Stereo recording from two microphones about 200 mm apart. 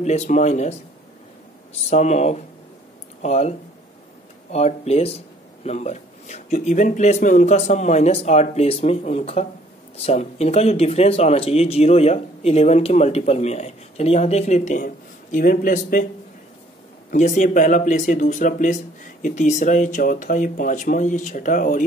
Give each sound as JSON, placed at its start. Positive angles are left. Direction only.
{"t": 0.0, "sound": "speech", "side_deg": 35}
{"t": 17.1, "sound": "speech", "side_deg": 40}